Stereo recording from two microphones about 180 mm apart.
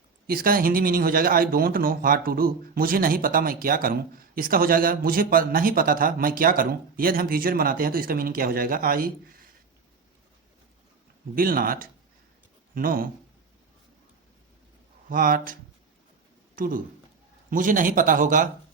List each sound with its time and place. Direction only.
0.3 s speech: 55° right (ahead or behind)
11.3 s speech: 50° right (ahead or behind)
15.1 s speech: 50° right (ahead or behind)
16.6 s speech: 50° right (ahead or behind)